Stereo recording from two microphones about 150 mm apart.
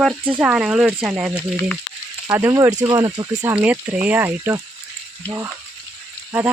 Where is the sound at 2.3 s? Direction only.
20° right (ahead or behind).